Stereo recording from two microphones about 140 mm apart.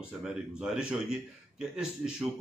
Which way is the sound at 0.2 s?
5° right (ahead or behind).